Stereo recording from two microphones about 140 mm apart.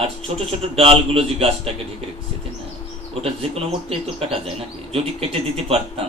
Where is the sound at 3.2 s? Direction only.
45° right (ahead or behind).